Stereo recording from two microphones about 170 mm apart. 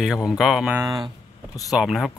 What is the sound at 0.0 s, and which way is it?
Speech, 5° right (ahead or behind).